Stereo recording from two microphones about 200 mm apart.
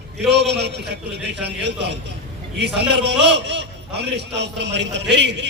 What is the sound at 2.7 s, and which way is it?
A man's voice, 60° right (ahead or behind).